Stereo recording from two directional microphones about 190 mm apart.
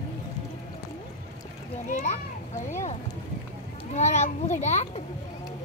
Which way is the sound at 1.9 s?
40° left (ahead or behind).